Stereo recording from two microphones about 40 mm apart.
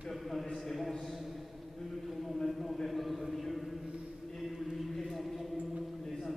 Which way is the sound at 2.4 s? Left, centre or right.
Centre.